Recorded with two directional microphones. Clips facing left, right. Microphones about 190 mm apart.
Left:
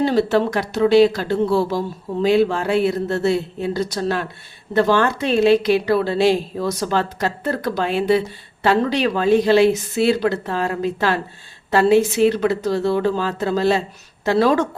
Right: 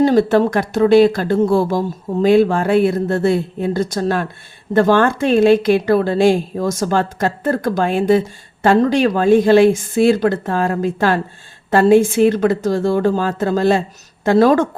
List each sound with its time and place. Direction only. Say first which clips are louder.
0.0 s speech: right 4 dB; 50° right (ahead or behind)